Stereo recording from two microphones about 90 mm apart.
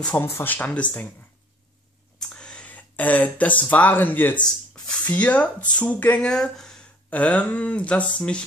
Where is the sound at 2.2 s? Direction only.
10° left (ahead or behind).